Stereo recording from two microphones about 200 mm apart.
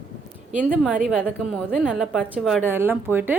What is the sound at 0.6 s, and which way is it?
A woman's voice, 5° right (ahead or behind).